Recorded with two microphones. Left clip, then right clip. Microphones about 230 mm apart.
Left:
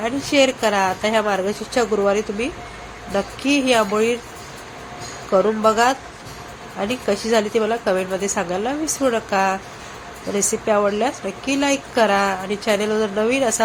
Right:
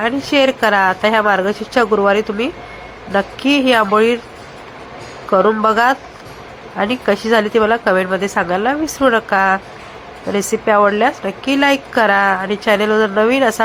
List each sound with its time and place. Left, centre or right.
0.0 s a woman's voice: centre
5.3 s a woman's voice: centre